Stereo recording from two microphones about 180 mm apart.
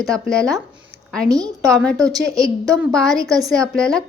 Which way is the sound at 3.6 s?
5° left (ahead or behind).